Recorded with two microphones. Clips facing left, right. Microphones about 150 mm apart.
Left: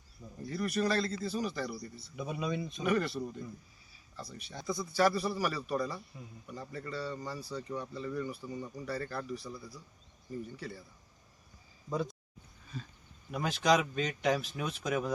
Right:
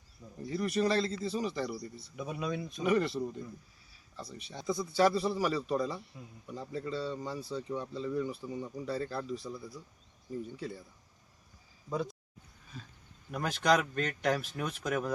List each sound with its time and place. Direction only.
0.4 s a man's voice: 20° right (ahead or behind)
2.1 s speech: centre (ahead or behind)
2.8 s a man's voice: 20° right (ahead or behind)
10.6 s a man's voice: 20° right (ahead or behind)
11.9 s speech: centre (ahead or behind)
13.3 s speech: 5° left (ahead or behind)